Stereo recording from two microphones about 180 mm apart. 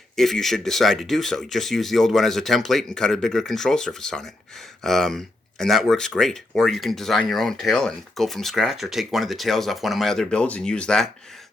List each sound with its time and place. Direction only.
0.2 s speech: centre (ahead or behind)